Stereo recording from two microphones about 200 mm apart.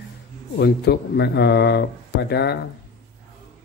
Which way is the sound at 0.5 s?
55° left (ahead or behind).